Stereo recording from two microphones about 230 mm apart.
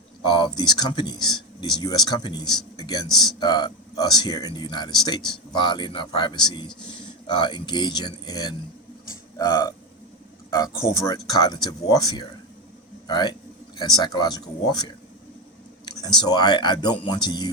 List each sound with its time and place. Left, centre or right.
0.3 s speech: left
3.1 s speech: centre
3.4 s speech: centre
10.8 s speech: centre
16.2 s speech: centre